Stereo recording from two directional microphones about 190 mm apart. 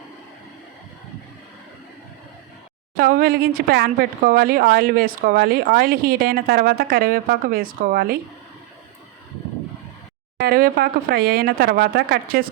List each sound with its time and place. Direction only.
2.9 s speech: 50° right (ahead or behind)
10.3 s speech: 55° right (ahead or behind)